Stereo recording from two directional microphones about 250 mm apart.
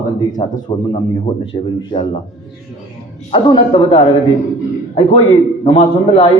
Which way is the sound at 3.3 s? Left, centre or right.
Centre.